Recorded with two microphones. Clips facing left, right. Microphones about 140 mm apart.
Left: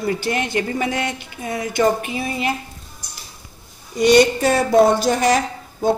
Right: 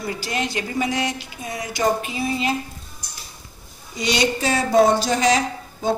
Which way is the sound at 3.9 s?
50° left (ahead or behind).